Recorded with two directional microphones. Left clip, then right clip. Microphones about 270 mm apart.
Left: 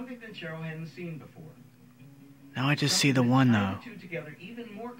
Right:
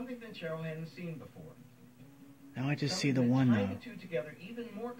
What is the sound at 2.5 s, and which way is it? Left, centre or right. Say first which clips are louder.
Speech: left 9 dB; centre.